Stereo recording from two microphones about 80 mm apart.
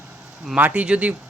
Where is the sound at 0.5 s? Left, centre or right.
Centre.